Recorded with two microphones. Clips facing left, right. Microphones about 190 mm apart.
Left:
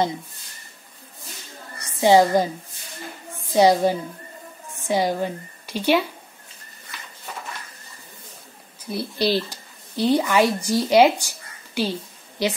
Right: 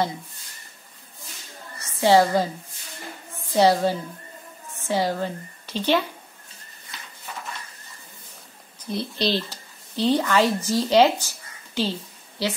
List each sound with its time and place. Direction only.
1.8 s a woman's voice: 15° left (ahead or behind)
3.5 s a woman's voice: 15° left (ahead or behind)
8.8 s speech: 10° left (ahead or behind)